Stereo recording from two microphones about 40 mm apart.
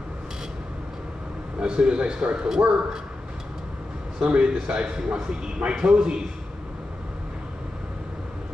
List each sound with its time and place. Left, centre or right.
1.6 s speech: right
4.2 s speech: right
4.9 s a man's voice: centre